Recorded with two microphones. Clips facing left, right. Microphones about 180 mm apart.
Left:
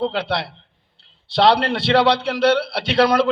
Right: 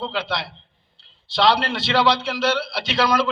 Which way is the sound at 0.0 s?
60° left (ahead or behind).